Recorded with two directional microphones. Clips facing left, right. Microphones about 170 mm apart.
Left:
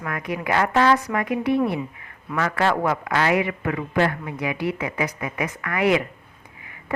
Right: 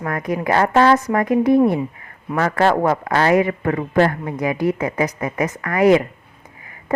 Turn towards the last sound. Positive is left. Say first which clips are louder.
# right 7 dB
turn(degrees=-40)  # may be behind; listen again after turning